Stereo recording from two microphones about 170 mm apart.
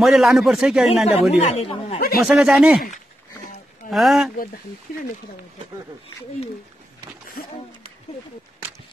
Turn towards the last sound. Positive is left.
turn(degrees=60)  # may be behind; listen again after turning